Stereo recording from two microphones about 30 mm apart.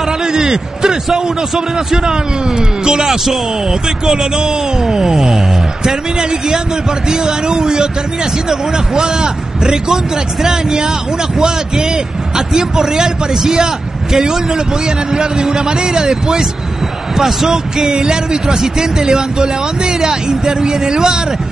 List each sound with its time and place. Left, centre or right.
0.2 s a sound: right
2.0 s speech: right
7.1 s a man's voice: right